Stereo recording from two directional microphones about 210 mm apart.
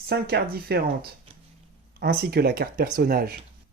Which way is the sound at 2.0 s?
50° right (ahead or behind).